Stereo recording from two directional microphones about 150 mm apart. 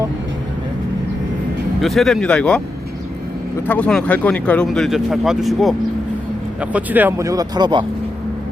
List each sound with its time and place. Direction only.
1.8 s speech: centre (ahead or behind)
3.7 s speech: 10° left (ahead or behind)
6.6 s speech: 10° right (ahead or behind)
7.3 s speech: 25° right (ahead or behind)